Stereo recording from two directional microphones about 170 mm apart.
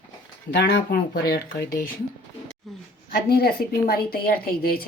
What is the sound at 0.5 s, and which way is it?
Speech, 65° left (ahead or behind).